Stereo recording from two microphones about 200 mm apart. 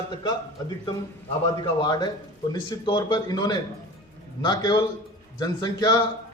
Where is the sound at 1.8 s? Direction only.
20° left (ahead or behind).